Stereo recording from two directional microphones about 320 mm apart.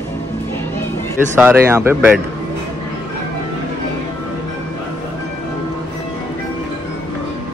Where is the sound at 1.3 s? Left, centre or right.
Centre.